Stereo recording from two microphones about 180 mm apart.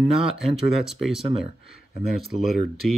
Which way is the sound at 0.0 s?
5° right (ahead or behind).